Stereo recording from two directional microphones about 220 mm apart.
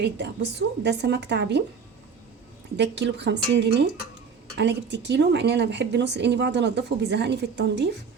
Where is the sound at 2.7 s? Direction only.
50° right (ahead or behind).